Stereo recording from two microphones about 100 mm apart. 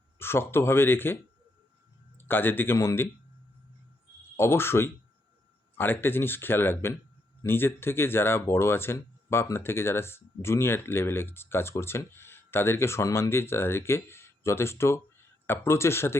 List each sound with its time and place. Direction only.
0.2 s speech: 25° left (ahead or behind)
4.4 s speech: 25° left (ahead or behind)